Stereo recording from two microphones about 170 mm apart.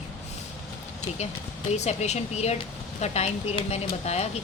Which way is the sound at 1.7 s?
40° left (ahead or behind).